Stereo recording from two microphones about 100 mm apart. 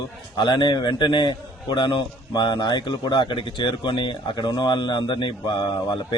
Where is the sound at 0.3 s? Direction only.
50° left (ahead or behind).